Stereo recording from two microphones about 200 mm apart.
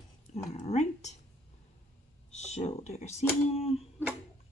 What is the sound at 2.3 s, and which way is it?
Speech, 35° left (ahead or behind).